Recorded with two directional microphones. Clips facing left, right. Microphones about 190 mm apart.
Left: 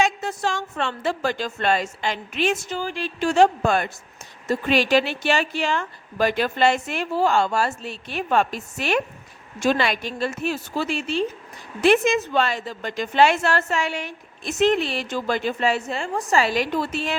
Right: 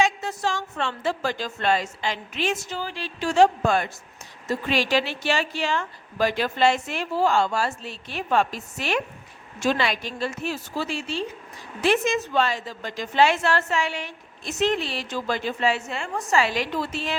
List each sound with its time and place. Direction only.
0.0 s a woman's voice: 50° left (ahead or behind)